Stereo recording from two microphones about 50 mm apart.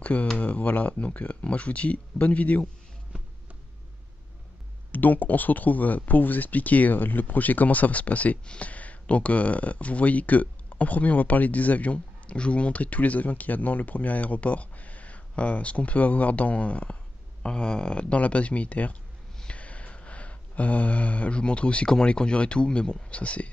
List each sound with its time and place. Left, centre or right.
0.0 s speech: left
4.9 s speech: left
19.4 s a sound: left
21.9 s speech: centre